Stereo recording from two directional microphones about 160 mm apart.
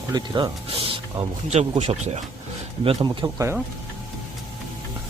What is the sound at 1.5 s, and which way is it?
Speech, 40° right (ahead or behind).